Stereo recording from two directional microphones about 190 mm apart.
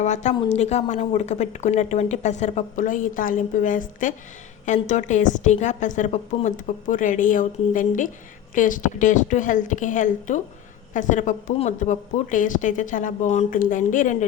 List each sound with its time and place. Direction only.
0.0 s a woman's voice: 35° left (ahead or behind)